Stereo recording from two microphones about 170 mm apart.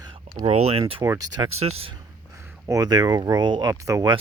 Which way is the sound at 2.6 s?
20° right (ahead or behind).